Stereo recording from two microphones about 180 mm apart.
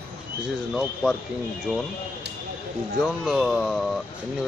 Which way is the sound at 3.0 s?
Centre (ahead or behind).